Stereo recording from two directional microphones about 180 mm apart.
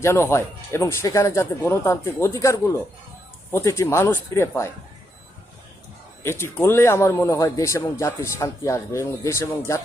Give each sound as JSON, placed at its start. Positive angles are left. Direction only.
{"t": 0.0, "sound": "a man's voice", "side_deg": 15}
{"t": 6.2, "sound": "a man's voice", "side_deg": 10}